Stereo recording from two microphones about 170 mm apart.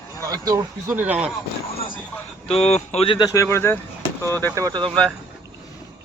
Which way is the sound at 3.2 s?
15° left (ahead or behind).